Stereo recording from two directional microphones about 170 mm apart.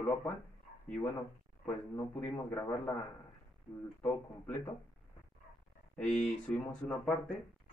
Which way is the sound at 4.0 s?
10° left (ahead or behind).